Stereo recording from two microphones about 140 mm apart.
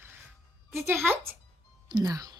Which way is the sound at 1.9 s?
25° right (ahead or behind).